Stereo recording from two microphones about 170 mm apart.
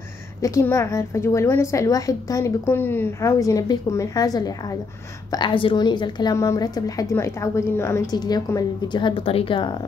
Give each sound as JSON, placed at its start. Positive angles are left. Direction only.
{"t": 0.4, "sound": "a woman's voice", "side_deg": 15}